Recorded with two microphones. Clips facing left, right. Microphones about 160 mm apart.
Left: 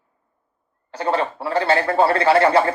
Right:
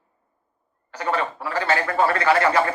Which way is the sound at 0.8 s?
30° left (ahead or behind).